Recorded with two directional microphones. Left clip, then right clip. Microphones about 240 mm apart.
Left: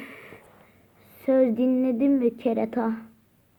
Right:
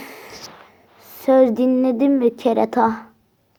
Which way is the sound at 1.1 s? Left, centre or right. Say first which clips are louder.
Right 7 dB; centre.